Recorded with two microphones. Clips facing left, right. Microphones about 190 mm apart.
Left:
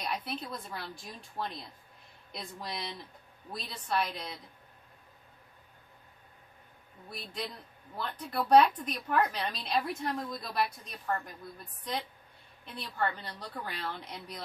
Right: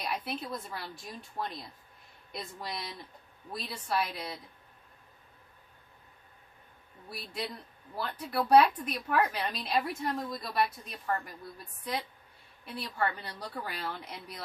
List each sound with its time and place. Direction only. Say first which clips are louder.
0.0 s speech: right 1 dB; 5° right (ahead or behind)
7.1 s speech: right 2 dB; 5° right (ahead or behind)
12.6 s speech: right 1 dB; 5° right (ahead or behind)